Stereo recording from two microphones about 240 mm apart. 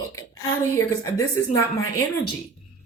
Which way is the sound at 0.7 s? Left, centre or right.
Centre.